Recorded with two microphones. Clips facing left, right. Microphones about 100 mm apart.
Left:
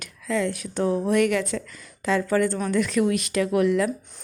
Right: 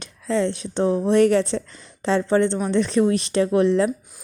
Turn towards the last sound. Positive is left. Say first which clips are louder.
# right 3 dB
turn(degrees=-30)  # may be behind; listen again after turning